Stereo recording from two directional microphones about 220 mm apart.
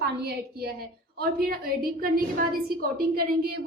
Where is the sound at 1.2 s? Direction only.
45° right (ahead or behind).